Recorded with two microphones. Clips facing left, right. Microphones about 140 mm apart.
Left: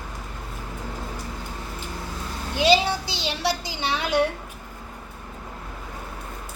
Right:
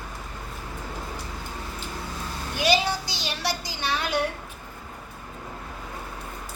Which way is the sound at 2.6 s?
25° left (ahead or behind).